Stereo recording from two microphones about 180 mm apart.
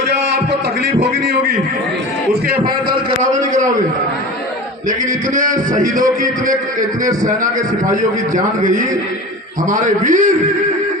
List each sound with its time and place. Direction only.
3.2 s a sound: 45° right (ahead or behind)
4.9 s a man's voice: 45° right (ahead or behind)
8.6 s a man's voice: 45° right (ahead or behind)